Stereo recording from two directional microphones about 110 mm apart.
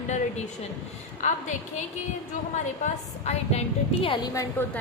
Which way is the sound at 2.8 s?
85° left.